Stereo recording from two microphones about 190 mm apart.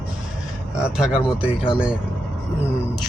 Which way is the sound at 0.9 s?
5° right (ahead or behind).